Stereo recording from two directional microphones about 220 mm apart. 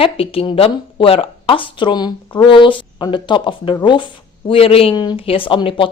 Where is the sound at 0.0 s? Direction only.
25° left (ahead or behind).